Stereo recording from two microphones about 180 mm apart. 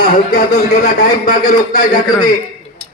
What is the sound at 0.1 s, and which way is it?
A man's voice, 50° left (ahead or behind).